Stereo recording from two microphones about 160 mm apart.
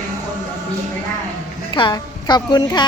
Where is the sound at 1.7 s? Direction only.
30° left (ahead or behind).